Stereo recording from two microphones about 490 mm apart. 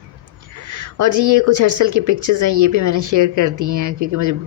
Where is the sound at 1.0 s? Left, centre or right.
Right.